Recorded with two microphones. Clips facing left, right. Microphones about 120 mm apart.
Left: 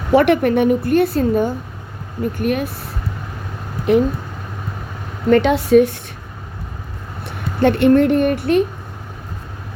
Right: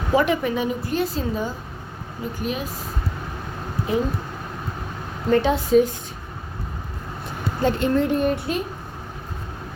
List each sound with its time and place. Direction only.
0.1 s a woman's voice: 70° left (ahead or behind)
3.9 s a woman's voice: 75° left (ahead or behind)
5.3 s a woman's voice: 70° left (ahead or behind)
7.3 s speech: 70° left (ahead or behind)